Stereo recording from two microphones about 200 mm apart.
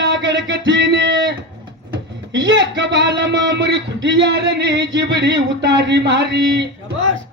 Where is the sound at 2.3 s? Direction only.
65° right (ahead or behind).